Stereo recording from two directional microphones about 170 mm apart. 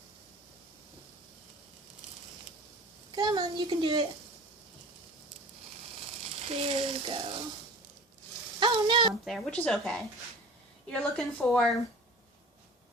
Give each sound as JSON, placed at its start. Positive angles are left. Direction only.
{"t": 3.1, "sound": "a woman's voice", "side_deg": -20}
{"t": 6.4, "sound": "speech", "side_deg": -35}
{"t": 8.5, "sound": "sizzle", "side_deg": -25}
{"t": 9.2, "sound": "a woman's voice", "side_deg": 5}